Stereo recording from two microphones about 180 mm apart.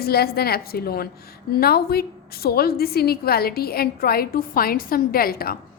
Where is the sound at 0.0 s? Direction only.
60° left (ahead or behind).